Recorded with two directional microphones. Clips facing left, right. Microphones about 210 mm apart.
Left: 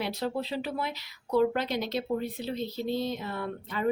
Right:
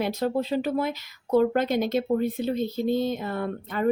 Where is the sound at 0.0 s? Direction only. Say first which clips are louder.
Right 6 dB; 45° right (ahead or behind).